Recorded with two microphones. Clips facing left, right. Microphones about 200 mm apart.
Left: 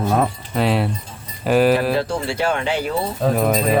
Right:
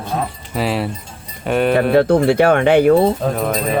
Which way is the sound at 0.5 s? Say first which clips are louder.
Left 1 dB; centre (ahead or behind).